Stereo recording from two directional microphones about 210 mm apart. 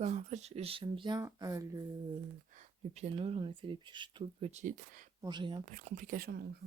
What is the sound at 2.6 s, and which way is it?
Speech, 30° right (ahead or behind).